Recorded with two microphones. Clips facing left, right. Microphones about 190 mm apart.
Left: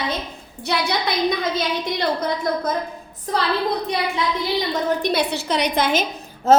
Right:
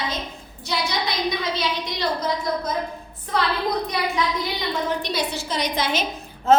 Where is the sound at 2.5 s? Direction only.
55° left (ahead or behind).